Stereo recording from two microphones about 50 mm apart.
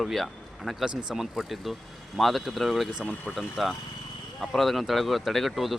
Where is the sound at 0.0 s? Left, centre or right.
Centre.